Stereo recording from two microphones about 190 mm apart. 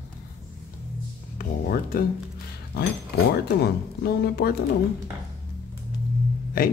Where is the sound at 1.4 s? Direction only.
50° left (ahead or behind).